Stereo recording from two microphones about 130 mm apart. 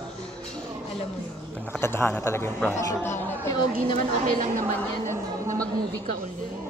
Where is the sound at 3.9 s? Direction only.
90° right.